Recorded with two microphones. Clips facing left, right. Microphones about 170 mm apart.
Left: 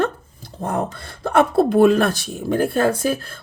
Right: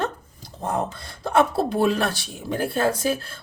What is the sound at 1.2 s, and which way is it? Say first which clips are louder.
Speech: left 4 dB; 55° left (ahead or behind).